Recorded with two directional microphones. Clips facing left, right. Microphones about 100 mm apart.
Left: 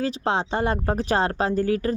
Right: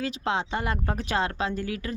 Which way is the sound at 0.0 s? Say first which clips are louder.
Left 4 dB; 35° left (ahead or behind).